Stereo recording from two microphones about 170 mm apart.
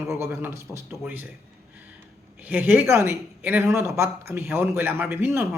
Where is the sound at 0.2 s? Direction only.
15° right (ahead or behind).